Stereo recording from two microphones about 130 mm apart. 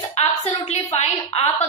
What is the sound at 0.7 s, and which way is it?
Speech, 55° left (ahead or behind).